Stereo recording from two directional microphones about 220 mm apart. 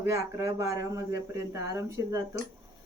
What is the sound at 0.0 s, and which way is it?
Speech, 15° right (ahead or behind).